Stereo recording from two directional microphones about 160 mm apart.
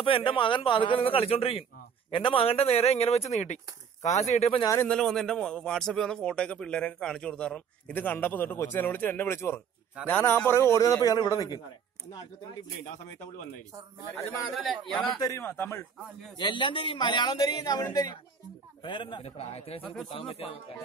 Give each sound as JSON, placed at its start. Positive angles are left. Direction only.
{"t": 0.0, "sound": "a man's voice", "side_deg": 35}
{"t": 4.8, "sound": "a man's voice", "side_deg": 5}
{"t": 14.5, "sound": "a man's voice", "side_deg": 0}
{"t": 15.1, "sound": "a man's voice", "side_deg": 20}
{"t": 16.3, "sound": "a man's voice", "side_deg": 30}